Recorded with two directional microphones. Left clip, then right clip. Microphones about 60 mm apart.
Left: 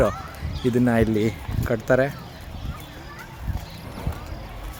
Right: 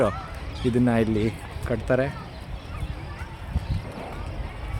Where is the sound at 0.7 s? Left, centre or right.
Left.